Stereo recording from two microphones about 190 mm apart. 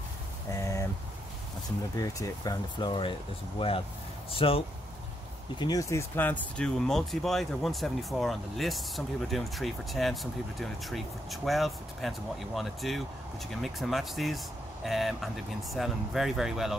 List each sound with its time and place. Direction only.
0.6 s vehicle: 15° left (ahead or behind)
2.0 s speech: 20° left (ahead or behind)
5.6 s speech: 20° left (ahead or behind); by 16.7 s centre (ahead or behind)